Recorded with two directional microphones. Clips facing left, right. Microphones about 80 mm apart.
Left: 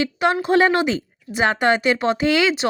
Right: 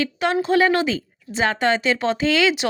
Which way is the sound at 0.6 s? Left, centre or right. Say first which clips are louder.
Left 1 dB; left.